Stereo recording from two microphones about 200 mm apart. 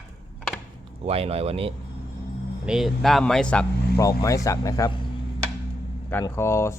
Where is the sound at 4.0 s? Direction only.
15° left (ahead or behind).